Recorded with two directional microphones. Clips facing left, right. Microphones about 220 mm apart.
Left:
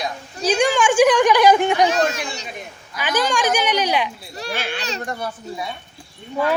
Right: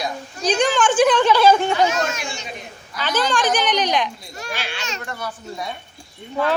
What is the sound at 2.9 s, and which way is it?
A woman's voice, 15° left (ahead or behind).